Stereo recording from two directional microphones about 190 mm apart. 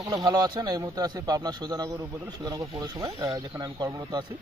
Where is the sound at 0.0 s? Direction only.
20° right (ahead or behind).